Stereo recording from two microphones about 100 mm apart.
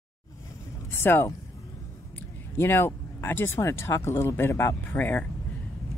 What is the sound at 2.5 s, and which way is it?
Speech, 25° left (ahead or behind).